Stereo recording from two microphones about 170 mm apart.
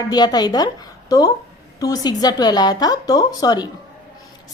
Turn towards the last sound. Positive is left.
turn(degrees=25)  # may be behind; listen again after turning